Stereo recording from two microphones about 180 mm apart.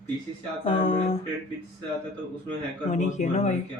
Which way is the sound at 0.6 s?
35° left (ahead or behind).